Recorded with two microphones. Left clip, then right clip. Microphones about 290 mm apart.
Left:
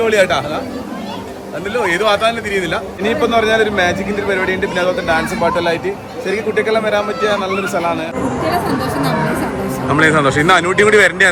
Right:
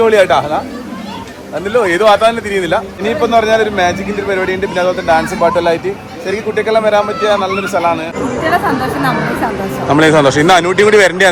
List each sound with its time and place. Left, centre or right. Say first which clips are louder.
0.0 s speech: right 4 dB; centre
1.7 s speech: right 5 dB; centre
3.0 s a man's voice: right 1 dB; centre
9.9 s speech: right 4 dB; centre